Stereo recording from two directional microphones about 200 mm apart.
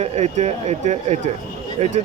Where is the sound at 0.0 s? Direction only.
35° right (ahead or behind).